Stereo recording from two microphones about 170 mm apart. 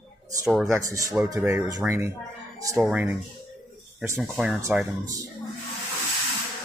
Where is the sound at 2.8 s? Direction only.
5° right (ahead or behind).